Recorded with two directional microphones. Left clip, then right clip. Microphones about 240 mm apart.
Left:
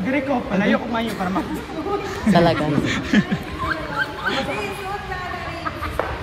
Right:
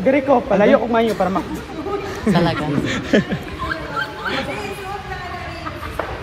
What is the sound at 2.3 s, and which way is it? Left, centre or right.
Speech, left.